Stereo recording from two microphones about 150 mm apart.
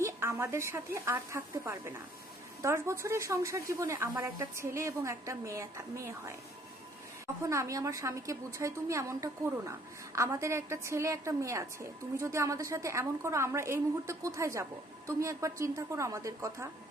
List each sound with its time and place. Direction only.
0.0 s a woman's voice: 15° right (ahead or behind)
7.4 s a woman's voice: 20° right (ahead or behind)